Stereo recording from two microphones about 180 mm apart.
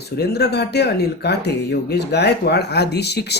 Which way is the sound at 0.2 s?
65° left (ahead or behind).